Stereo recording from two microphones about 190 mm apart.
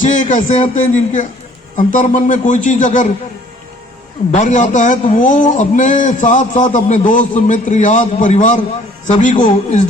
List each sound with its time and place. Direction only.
0.0 s a man's voice: 40° left (ahead or behind)
4.3 s a man's voice: 40° left (ahead or behind)